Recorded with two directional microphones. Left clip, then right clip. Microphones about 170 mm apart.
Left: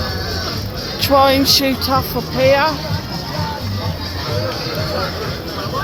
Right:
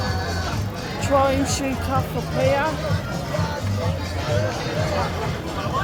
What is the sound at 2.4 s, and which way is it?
Speech, 55° left (ahead or behind).